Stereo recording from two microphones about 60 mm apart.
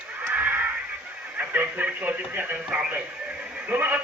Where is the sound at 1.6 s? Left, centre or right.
Right.